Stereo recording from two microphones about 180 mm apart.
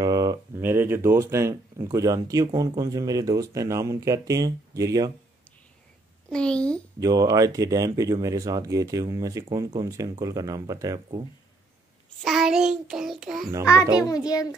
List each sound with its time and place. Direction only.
0.0 s speech: 20° right (ahead or behind)
6.3 s child singing: 5° left (ahead or behind)
7.0 s speech: 20° right (ahead or behind)
12.2 s child singing: centre (ahead or behind)
14.0 s child singing: 20° left (ahead or behind)